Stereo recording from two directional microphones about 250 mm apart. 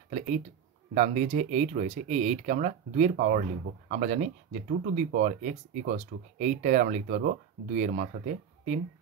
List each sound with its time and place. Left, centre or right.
0.9 s speech: right